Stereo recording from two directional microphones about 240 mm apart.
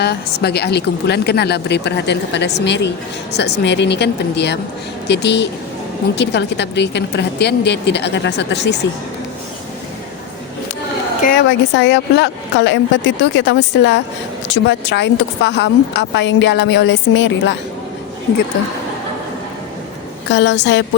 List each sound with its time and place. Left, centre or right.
0.0 s speech: left
11.2 s speech: left
20.3 s speech: left